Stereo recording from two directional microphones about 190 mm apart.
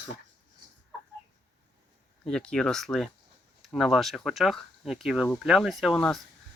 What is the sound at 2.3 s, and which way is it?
Speech, 5° left (ahead or behind).